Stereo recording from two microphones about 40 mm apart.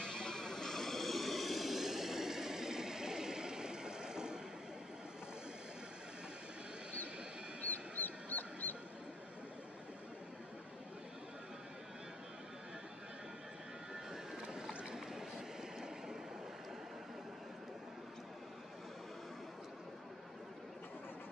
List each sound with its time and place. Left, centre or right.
0.0 s vehicle: centre
8.0 s a sound: left
14.1 s boat: centre
14.7 s boat: right
15.1 s vehicle: centre